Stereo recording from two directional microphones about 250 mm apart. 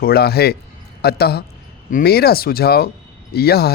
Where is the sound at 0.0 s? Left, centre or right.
Left.